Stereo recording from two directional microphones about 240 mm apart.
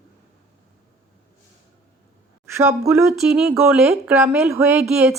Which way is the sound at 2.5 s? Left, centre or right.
Centre.